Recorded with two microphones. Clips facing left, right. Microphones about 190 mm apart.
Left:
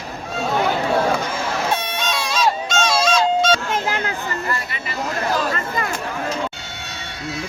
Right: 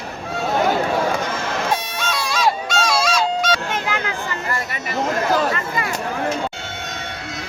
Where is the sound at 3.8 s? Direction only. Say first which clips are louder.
Left 1 dB; 40° left (ahead or behind).